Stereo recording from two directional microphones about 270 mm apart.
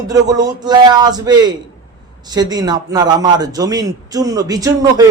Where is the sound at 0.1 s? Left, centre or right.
Centre.